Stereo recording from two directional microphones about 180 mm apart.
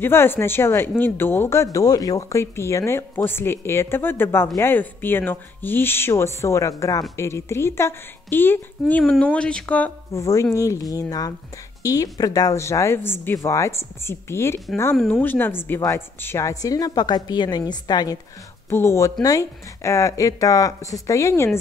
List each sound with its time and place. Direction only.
0.0 s a woman's voice: 10° left (ahead or behind)